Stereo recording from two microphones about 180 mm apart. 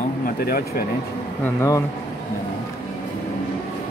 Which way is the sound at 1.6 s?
20° left (ahead or behind).